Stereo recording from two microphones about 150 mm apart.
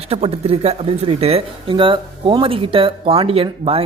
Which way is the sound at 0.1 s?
40° right (ahead or behind).